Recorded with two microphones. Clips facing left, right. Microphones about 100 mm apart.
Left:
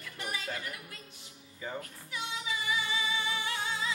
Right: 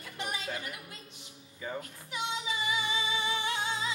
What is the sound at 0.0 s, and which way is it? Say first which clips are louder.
Music: right 1 dB; 20° right (ahead or behind).